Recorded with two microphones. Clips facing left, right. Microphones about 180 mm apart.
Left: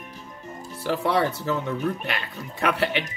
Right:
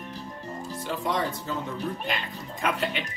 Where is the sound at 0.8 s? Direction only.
70° left (ahead or behind).